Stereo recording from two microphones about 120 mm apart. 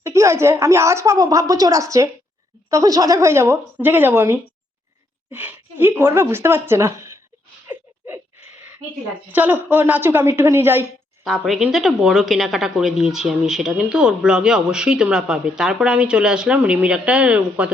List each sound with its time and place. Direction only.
0.0 s a woman's voice: 25° right (ahead or behind)
7.7 s a sound: 20° right (ahead or behind)
9.3 s a woman's voice: 15° right (ahead or behind)
11.2 s speech: centre (ahead or behind)